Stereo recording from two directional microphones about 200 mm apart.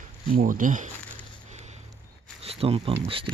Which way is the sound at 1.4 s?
35° right (ahead or behind).